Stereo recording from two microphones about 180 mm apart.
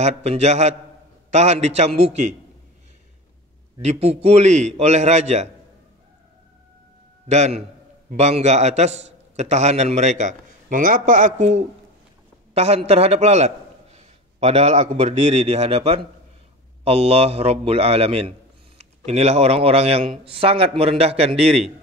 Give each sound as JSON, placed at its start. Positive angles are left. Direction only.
{"t": 0.0, "sound": "a man's voice", "side_deg": -40}
{"t": 3.8, "sound": "a man's voice", "side_deg": -35}
{"t": 7.2, "sound": "a man's voice", "side_deg": -40}